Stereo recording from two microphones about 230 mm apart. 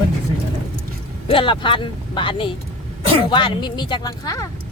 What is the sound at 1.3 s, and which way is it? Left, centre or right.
Speech, left.